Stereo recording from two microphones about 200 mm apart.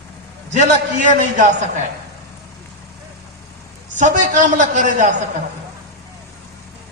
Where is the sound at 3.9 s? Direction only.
40° right (ahead or behind).